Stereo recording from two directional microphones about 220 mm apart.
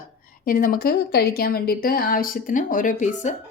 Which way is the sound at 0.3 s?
40° left (ahead or behind).